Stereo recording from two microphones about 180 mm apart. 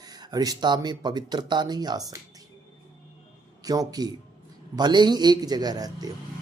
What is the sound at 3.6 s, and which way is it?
Speech, 20° right (ahead or behind).